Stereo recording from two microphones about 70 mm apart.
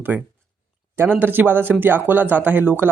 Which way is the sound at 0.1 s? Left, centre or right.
Right.